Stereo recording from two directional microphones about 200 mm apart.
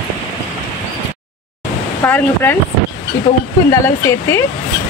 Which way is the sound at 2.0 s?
10° left (ahead or behind).